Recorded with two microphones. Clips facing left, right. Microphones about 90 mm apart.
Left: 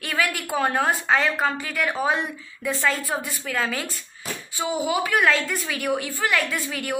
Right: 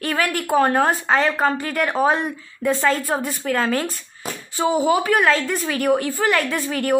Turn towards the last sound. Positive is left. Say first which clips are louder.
# right 8 dB
turn(degrees=-35)  # may be behind; listen again after turning